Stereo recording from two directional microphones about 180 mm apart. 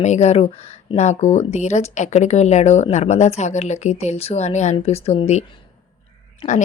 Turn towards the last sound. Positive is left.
turn(degrees=25)  # may be behind; listen again after turning